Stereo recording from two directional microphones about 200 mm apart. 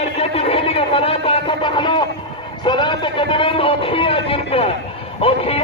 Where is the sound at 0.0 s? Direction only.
30° left (ahead or behind).